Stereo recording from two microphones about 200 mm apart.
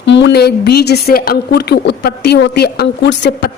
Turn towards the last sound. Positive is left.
turn(degrees=55)  # may be behind; listen again after turning